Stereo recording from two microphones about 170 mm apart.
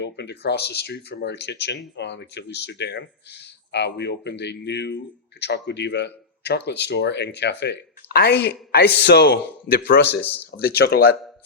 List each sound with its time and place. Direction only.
0.0 s a man's voice: 80° left